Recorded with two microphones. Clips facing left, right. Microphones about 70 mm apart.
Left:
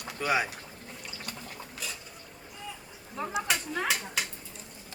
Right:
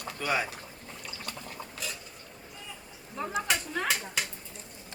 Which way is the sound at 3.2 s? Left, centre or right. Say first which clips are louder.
Even; centre.